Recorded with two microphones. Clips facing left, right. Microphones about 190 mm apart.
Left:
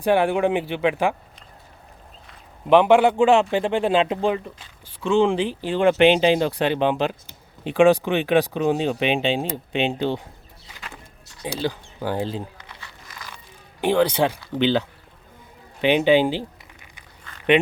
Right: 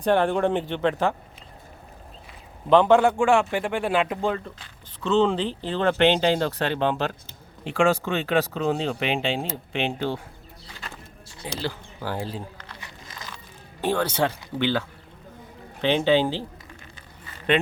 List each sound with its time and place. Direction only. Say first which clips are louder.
0.0 s speech: left 2 dB; 10° left (ahead or behind)
2.6 s speech: left 2 dB; 10° left (ahead or behind)
11.4 s speech: left 5 dB; 15° left (ahead or behind)
12.8 s a sound: right 1 dB; 20° right (ahead or behind)
13.8 s speech: left 5 dB; 15° left (ahead or behind)